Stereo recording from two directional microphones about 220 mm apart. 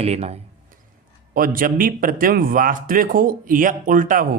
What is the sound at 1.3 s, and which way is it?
Speech, 40° right (ahead or behind).